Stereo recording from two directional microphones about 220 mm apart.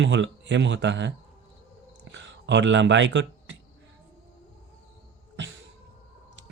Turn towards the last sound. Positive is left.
turn(degrees=-55)  # may be behind; listen again after turning